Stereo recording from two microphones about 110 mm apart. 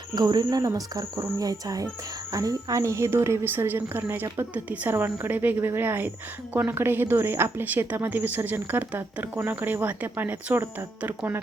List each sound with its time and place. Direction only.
0.2 s a woman's voice: 40° right (ahead or behind); by 11.3 s 15° right (ahead or behind)